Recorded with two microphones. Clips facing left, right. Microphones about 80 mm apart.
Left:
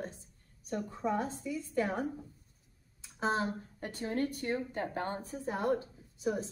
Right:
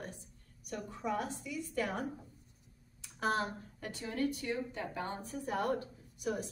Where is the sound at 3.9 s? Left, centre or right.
Left.